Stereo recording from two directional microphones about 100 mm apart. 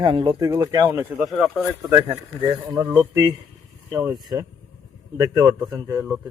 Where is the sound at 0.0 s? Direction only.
55° right (ahead or behind).